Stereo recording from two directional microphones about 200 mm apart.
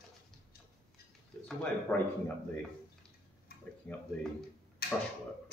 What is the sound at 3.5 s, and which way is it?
Tick-tock, 50° left (ahead or behind).